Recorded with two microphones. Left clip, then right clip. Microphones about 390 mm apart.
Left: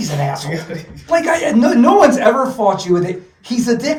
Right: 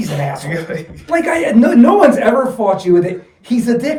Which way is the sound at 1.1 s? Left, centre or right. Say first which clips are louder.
Even; centre.